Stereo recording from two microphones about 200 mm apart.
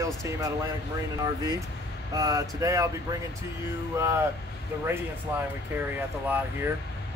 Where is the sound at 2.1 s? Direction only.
15° right (ahead or behind).